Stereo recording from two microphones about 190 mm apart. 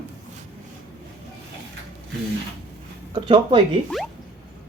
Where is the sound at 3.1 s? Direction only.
25° right (ahead or behind).